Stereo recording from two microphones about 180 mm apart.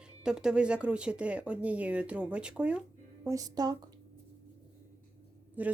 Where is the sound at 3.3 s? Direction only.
20° right (ahead or behind).